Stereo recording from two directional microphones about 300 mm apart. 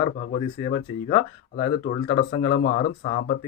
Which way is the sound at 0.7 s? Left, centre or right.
Left.